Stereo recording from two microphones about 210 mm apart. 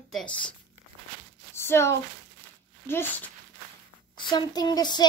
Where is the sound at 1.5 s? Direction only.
10° left (ahead or behind).